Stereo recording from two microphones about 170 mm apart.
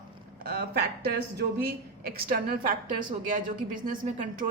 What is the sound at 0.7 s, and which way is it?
Speech, 70° right (ahead or behind).